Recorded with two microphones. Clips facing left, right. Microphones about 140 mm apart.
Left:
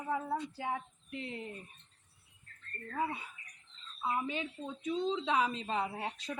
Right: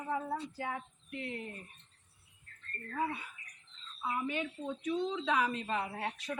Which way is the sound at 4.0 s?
25° left (ahead or behind).